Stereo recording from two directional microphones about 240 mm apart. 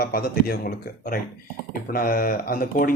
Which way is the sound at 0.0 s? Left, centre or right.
Left.